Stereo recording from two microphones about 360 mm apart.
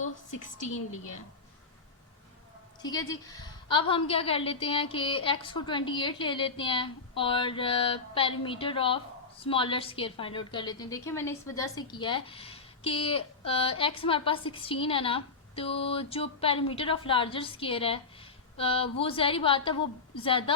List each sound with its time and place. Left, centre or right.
0.7 s a woman's voice: left
2.8 s a woman's voice: centre